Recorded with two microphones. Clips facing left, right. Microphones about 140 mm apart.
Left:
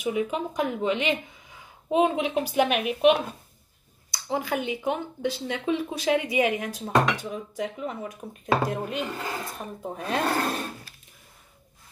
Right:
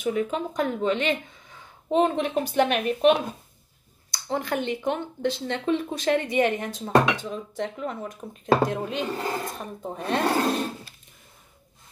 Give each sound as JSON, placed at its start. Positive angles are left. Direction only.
{"t": 0.0, "sound": "speech", "side_deg": 10}
{"t": 9.1, "sound": "speech", "side_deg": -35}
{"t": 9.5, "sound": "speech", "side_deg": 5}